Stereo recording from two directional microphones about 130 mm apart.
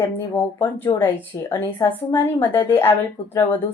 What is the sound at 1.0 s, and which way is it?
A woman's voice, 15° left (ahead or behind).